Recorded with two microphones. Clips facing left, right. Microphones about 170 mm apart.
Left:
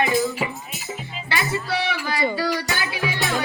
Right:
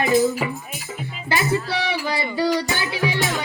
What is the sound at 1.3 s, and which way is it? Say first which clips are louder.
Music: right 4 dB; 35° right (ahead or behind).